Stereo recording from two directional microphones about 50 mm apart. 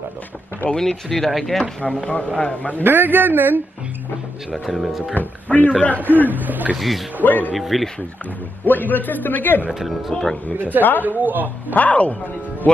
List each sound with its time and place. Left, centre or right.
0.7 s speech: centre
1.9 s a man's voice: left
2.8 s a man's voice: right
4.6 s speech: centre
5.1 s a man's voice: left
5.9 s a man's voice: right
6.7 s speech: centre
7.2 s a man's voice: left
7.5 s speech: centre
8.6 s a man's voice: left
9.7 s speech: centre
11.0 s a man's voice: right
11.7 s a man's voice: left